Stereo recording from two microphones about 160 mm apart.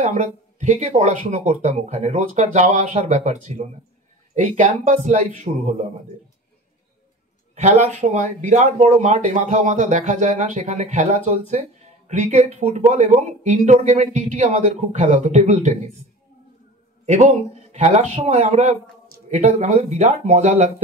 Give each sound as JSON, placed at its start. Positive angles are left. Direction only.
{"t": 0.0, "sound": "speech", "side_deg": -50}
{"t": 7.5, "sound": "speech", "side_deg": -45}
{"t": 17.0, "sound": "a man's voice", "side_deg": -45}